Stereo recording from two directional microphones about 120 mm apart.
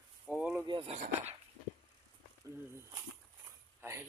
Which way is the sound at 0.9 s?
90° right.